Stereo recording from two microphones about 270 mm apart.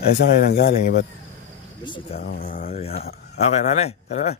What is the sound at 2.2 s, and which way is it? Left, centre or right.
Speech, left.